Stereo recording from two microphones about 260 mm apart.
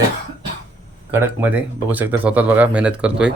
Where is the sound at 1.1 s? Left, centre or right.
Centre.